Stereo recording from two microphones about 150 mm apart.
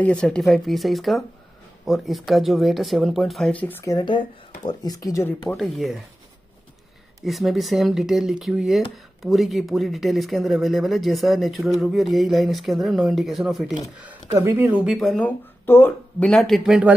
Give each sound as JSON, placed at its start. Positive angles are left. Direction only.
{"t": 0.0, "sound": "speech", "side_deg": 5}
{"t": 5.6, "sound": "speech", "side_deg": 0}
{"t": 7.2, "sound": "speech", "side_deg": 0}
{"t": 14.3, "sound": "speech", "side_deg": -15}
{"t": 14.9, "sound": "speech", "side_deg": 5}